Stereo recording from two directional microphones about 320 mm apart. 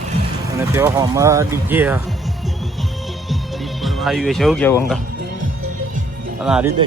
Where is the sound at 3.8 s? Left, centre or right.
Centre.